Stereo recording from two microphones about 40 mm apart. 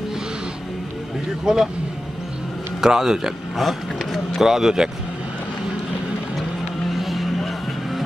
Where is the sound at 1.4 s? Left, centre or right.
Centre.